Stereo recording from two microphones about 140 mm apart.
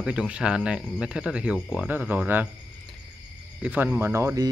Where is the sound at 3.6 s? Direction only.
10° right (ahead or behind).